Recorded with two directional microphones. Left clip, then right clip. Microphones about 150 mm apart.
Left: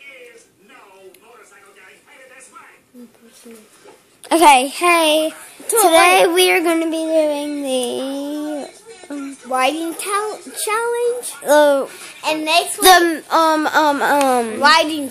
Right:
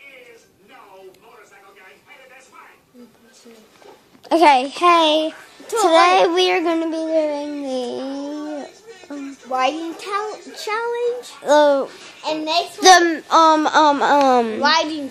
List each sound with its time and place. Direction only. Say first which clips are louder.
4.2 s a sound: left 1 dB; 5° left (ahead or behind)
4.5 s a child's voice: left 4 dB; 15° left (ahead or behind)
4.7 s a child's voice: even; 5° right (ahead or behind)
5.6 s a child's voice: left 3 dB; 40° left (ahead or behind)
5.9 s a child's voice: left 2 dB; 5° left (ahead or behind)
9.5 s a child's voice: left 2 dB; 40° left (ahead or behind)
11.4 s a child's voice: left 1 dB; centre (ahead or behind)
12.2 s a child's voice: left 4 dB; 25° left (ahead or behind)
12.8 s a child's voice: right 1 dB; centre (ahead or behind)
14.3 s a woman's voice: right 1 dB; 15° right (ahead or behind)
14.6 s a child's voice: left 4 dB; 40° left (ahead or behind)